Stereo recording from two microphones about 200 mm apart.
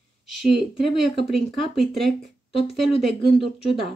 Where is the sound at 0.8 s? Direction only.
Centre (ahead or behind).